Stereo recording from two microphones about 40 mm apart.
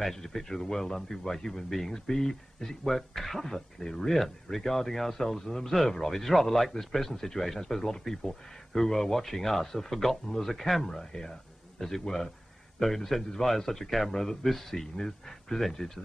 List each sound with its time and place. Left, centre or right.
0.0 s speech: centre
12.7 s speech: centre